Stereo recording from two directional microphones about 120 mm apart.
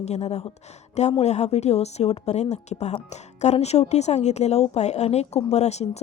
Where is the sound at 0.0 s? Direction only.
65° left (ahead or behind).